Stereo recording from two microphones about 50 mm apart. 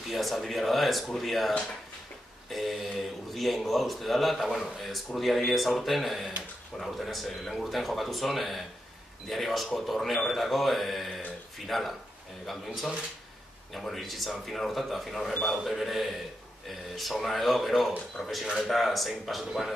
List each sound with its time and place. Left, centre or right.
0.1 s speech: centre
2.5 s speech: centre